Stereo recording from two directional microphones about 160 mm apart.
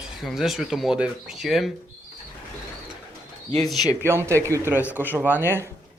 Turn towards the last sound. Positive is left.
turn(degrees=-10)  # may be behind; listen again after turning